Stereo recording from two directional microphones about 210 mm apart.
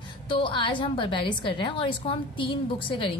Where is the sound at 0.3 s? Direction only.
25° left (ahead or behind).